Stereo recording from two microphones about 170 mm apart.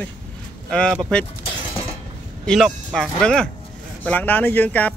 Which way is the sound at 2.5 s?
5° left (ahead or behind).